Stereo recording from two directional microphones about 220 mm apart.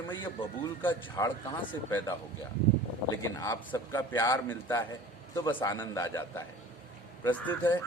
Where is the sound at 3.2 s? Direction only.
15° left (ahead or behind).